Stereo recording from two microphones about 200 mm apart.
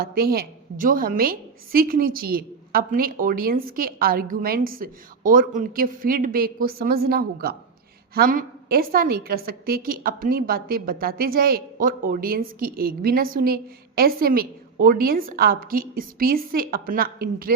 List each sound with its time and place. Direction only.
0.0 s a woman's voice: 50° right (ahead or behind)